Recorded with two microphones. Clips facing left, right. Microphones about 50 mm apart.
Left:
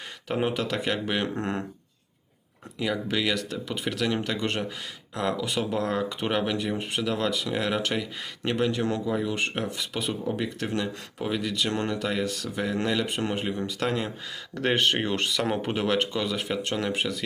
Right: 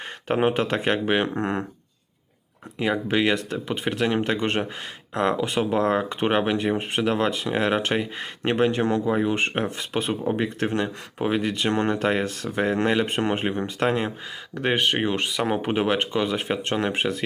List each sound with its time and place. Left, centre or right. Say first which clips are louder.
0.3 s speech: right 5 dB; right
2.7 s speech: right 5 dB; right
14.5 s speech: right 1 dB; centre; by 17.2 s right